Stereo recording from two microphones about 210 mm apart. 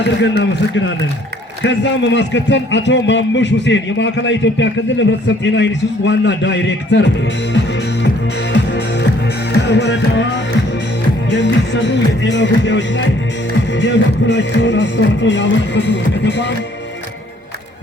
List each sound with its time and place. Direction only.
0.0 s a man's voice: 60° left (ahead or behind)
8.5 s music: 55° left (ahead or behind)
11.3 s a man's voice: 55° left (ahead or behind)